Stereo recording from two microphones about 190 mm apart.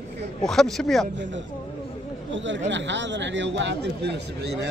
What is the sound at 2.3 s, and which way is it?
A man's voice, 70° right (ahead or behind).